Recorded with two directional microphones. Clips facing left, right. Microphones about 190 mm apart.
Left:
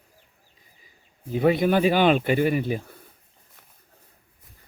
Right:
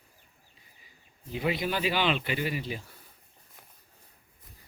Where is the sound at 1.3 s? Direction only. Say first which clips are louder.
Left 10 dB; 50° left (ahead or behind).